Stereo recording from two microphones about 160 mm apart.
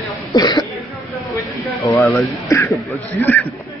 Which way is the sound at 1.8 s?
15° left (ahead or behind).